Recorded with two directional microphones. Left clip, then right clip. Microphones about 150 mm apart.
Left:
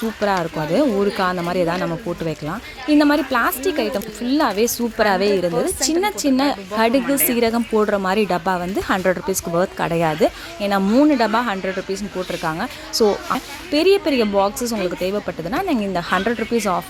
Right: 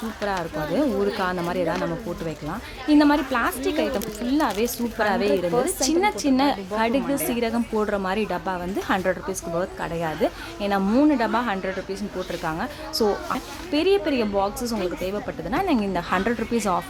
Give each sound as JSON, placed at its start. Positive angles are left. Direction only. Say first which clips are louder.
{"t": 0.2, "sound": "speech", "louder": "left 6 dB", "side_deg": 30}